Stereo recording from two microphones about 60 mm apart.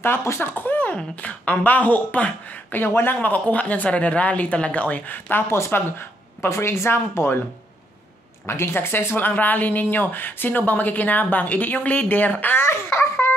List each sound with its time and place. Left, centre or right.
0.0 s speech: left
8.5 s speech: left
12.6 s baby laughter: left